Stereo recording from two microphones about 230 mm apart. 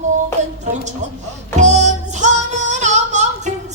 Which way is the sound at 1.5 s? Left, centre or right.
Right.